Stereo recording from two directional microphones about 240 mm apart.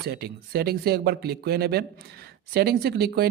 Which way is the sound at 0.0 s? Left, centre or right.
Right.